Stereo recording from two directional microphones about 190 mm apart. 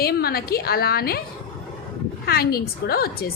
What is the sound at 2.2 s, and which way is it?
A woman's voice, 55° left (ahead or behind).